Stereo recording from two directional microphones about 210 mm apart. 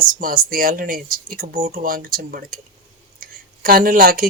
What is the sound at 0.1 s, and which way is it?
Speech, 40° right (ahead or behind).